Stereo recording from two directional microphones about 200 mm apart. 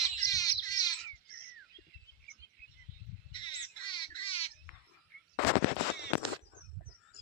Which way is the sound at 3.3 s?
25° left (ahead or behind).